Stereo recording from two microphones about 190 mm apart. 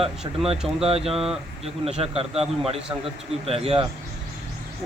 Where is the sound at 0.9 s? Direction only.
30° right (ahead or behind).